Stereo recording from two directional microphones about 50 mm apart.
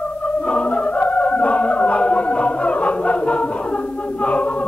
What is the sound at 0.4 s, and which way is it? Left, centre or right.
Music, left.